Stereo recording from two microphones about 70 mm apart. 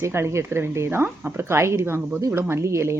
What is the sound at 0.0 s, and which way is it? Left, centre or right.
Speech, right.